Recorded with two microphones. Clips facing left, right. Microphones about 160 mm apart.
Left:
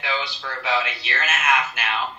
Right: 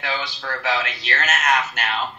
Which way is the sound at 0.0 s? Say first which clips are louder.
Even; 45° right (ahead or behind).